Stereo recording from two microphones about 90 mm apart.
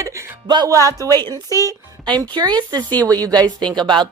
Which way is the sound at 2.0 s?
55° right (ahead or behind).